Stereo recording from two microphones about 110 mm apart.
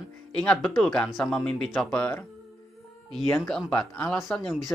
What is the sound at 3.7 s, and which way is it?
Speech, 10° left (ahead or behind).